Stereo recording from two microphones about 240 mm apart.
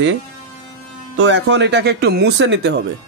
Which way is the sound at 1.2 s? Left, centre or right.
Right.